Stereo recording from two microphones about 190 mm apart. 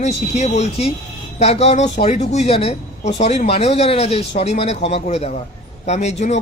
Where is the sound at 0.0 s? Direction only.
35° left (ahead or behind).